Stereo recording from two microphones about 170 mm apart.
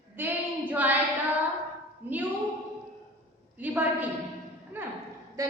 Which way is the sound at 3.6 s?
10° right (ahead or behind).